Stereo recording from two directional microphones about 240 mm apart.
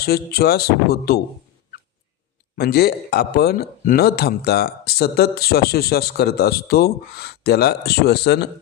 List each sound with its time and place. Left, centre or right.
0.0 s speech: left
2.6 s speech: left